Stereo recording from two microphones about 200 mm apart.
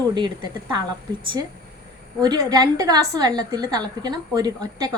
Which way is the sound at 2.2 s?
20° right (ahead or behind).